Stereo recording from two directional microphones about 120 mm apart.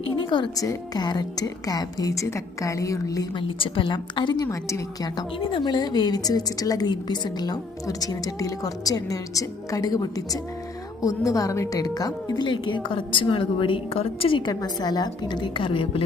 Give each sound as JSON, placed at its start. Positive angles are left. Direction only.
{"t": 0.0, "sound": "speech", "side_deg": 45}
{"t": 0.5, "sound": "a woman's voice", "side_deg": 30}
{"t": 3.3, "sound": "a woman's voice", "side_deg": 45}
{"t": 4.4, "sound": "a woman's voice", "side_deg": 25}
{"t": 5.4, "sound": "a woman's voice", "side_deg": 45}
{"t": 14.5, "sound": "a woman's voice", "side_deg": 35}